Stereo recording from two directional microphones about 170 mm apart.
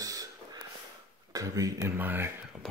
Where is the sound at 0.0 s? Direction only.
20° right (ahead or behind).